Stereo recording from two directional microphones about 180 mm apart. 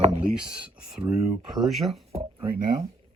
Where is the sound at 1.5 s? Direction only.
Centre (ahead or behind).